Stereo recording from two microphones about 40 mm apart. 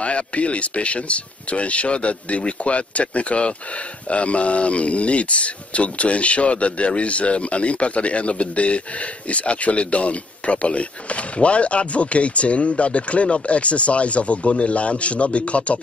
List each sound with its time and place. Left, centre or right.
0.0 s speech: left